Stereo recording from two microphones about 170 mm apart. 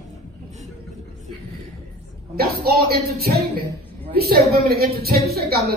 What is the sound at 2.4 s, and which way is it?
A woman's voice, 65° right (ahead or behind).